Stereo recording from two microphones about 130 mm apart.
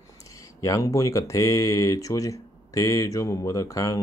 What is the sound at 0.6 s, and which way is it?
Speech, 25° left (ahead or behind).